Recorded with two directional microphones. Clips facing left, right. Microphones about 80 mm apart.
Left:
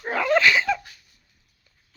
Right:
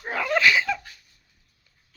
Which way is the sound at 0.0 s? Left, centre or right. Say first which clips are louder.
Left 2 dB; centre.